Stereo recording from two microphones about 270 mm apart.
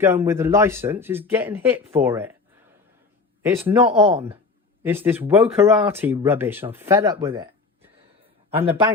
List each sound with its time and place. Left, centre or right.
0.0 s speech: centre
3.4 s a man's voice: centre